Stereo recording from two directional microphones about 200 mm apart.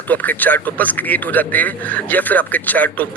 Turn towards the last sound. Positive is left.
turn(degrees=10)  # may be behind; listen again after turning